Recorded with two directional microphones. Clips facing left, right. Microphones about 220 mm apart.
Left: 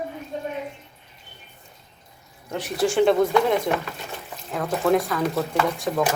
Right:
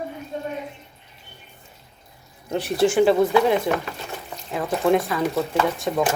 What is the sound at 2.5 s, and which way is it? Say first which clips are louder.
Speech: right 4 dB; 30° right (ahead or behind).